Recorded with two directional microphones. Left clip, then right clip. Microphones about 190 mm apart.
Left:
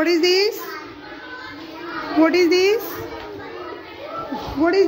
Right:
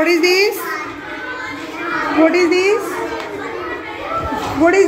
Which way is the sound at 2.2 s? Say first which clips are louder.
Right 2 dB; 50° left (ahead or behind).